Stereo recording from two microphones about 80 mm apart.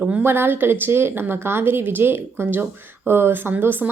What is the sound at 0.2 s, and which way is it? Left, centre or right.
A woman's voice, right.